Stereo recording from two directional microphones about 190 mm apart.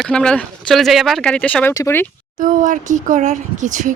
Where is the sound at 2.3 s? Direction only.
45° right (ahead or behind).